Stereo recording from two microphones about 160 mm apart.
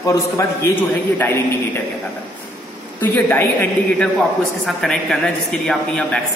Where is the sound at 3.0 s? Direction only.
15° left (ahead or behind).